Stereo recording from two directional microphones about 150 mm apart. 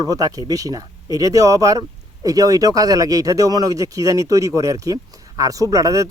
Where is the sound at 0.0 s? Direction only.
25° right (ahead or behind).